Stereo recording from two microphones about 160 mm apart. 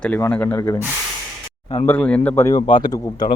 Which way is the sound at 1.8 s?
5° left (ahead or behind).